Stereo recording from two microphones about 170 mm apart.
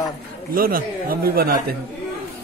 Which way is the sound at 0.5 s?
60° right (ahead or behind).